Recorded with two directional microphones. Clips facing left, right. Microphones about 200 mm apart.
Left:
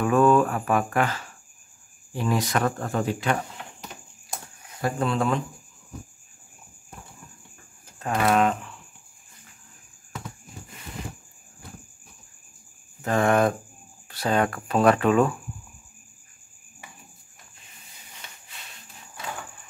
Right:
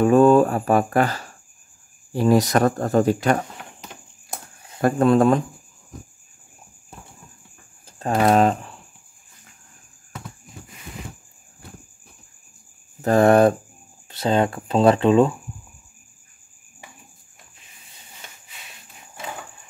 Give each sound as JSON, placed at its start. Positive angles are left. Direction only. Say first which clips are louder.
{"t": 0.0, "sound": "speech", "louder": "right 5 dB", "side_deg": -30}
{"t": 4.8, "sound": "speech", "louder": "right 9 dB", "side_deg": -50}
{"t": 7.8, "sound": "speech", "louder": "right 5 dB", "side_deg": -30}
{"t": 13.0, "sound": "speech", "louder": "right 7 dB", "side_deg": -35}
{"t": 14.0, "sound": "speech", "louder": "right 4 dB", "side_deg": -20}